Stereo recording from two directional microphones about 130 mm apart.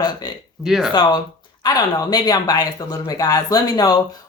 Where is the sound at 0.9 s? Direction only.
35° left (ahead or behind).